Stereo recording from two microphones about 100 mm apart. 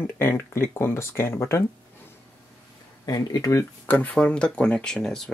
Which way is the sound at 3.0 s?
35° left (ahead or behind).